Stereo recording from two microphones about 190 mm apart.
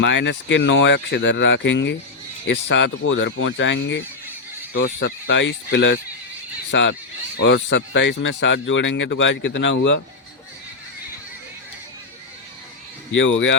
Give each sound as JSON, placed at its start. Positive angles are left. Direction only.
{"t": 0.0, "sound": "speech", "side_deg": 75}
{"t": 13.1, "sound": "speech", "side_deg": 90}